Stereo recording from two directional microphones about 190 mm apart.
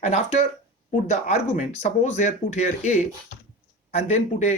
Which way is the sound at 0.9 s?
35° left (ahead or behind).